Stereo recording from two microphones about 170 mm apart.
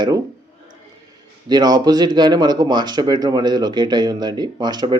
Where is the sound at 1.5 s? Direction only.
25° right (ahead or behind).